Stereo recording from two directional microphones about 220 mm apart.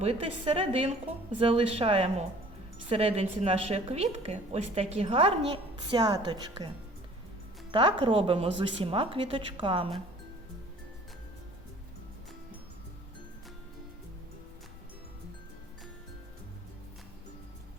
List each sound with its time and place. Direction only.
0.0 s a woman's voice: 25° right (ahead or behind)
7.7 s a woman's voice: 25° right (ahead or behind)